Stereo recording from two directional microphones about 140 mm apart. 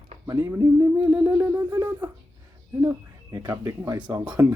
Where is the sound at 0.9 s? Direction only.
10° right (ahead or behind).